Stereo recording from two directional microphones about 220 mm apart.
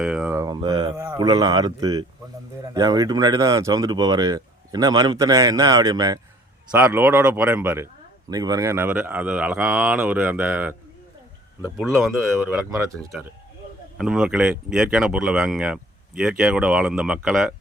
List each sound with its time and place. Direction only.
0.0 s a sound: 5° right (ahead or behind); by 0.9 s 20° right (ahead or behind)
0.9 s speech: 10° right (ahead or behind)
14.0 s speech: 5° right (ahead or behind)